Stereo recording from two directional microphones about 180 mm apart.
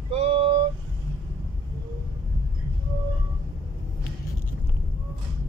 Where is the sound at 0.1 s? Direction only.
30° right (ahead or behind).